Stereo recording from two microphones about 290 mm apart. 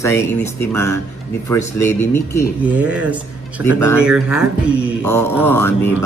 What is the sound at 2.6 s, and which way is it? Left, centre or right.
Speech, centre.